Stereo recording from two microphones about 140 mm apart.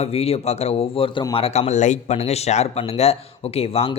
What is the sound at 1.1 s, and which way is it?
Speech, 40° left (ahead or behind).